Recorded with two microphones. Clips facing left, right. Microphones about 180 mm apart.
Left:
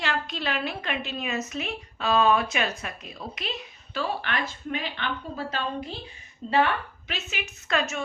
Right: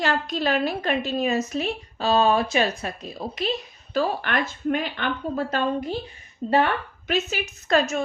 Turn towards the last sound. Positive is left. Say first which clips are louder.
# right 6 dB
turn(degrees=-40)  # may be behind; listen again after turning